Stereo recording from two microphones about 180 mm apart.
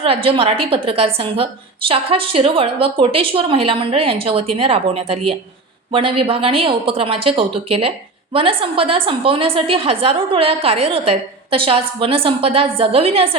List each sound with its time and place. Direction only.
0.0 s a woman's voice: 30° right (ahead or behind)